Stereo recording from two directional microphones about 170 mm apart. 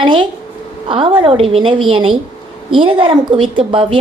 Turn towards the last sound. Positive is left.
turn(degrees=-30)  # may be behind; listen again after turning